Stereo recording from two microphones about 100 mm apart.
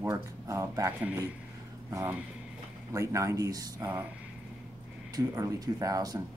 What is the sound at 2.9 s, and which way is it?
Speech, 30° right (ahead or behind).